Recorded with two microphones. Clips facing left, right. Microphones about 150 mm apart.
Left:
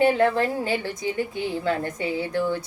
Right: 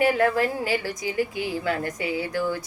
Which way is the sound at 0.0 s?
25° left (ahead or behind).